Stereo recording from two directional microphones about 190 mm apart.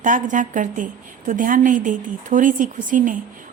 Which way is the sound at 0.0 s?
45° right (ahead or behind).